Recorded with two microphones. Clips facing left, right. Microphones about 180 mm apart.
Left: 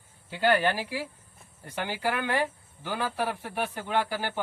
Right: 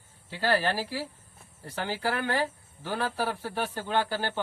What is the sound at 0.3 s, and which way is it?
Speech, 35° right (ahead or behind).